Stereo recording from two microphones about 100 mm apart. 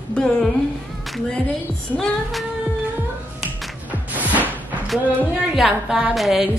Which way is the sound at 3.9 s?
15° right (ahead or behind).